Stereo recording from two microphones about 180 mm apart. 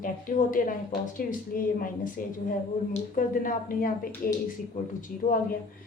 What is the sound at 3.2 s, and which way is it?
Speech, 50° left (ahead or behind).